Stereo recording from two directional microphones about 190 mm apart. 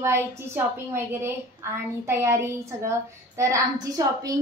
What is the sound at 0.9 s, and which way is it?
A woman's voice, 15° right (ahead or behind).